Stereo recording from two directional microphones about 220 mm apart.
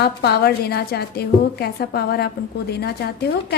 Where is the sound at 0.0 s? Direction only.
45° left (ahead or behind).